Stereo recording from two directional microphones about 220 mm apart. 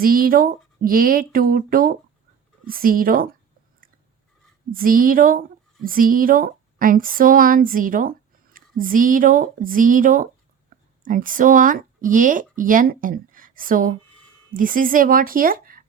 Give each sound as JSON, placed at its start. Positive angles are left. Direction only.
{"t": 0.0, "sound": "speech", "side_deg": -40}
{"t": 4.7, "sound": "speech", "side_deg": -40}